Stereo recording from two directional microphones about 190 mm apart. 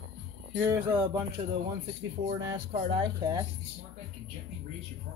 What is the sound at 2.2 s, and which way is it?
Speech, 30° right (ahead or behind).